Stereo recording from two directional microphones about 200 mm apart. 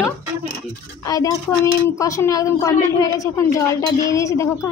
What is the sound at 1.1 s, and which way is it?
A woman's voice, 15° left (ahead or behind).